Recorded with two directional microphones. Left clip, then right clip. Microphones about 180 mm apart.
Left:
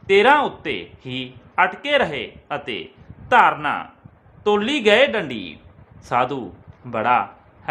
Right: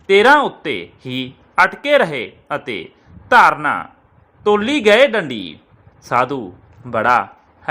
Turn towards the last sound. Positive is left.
turn(degrees=-25)  # may be behind; listen again after turning